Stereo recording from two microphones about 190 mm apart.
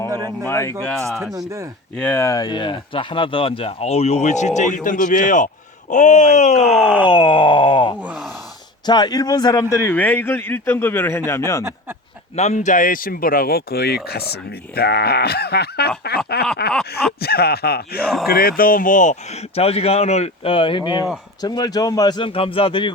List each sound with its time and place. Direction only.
0.4 s a man's voice: 15° left (ahead or behind)
1.2 s speech: 15° right (ahead or behind)
2.0 s speech: 10° left (ahead or behind); by 6.7 s 40° left (ahead or behind)
6.7 s speech: 5° right (ahead or behind)
7.0 s speech: 25° left (ahead or behind)
8.0 s speech: 5° right (ahead or behind)
8.9 s a man's voice: 20° left (ahead or behind)
12.4 s speech: 40° left (ahead or behind)